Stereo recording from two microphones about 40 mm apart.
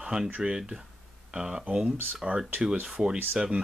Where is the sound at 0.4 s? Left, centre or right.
Centre.